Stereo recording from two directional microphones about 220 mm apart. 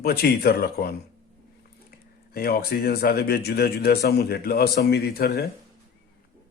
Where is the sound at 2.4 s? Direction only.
45° left (ahead or behind).